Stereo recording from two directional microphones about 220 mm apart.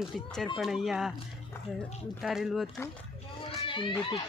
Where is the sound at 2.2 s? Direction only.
Centre (ahead or behind).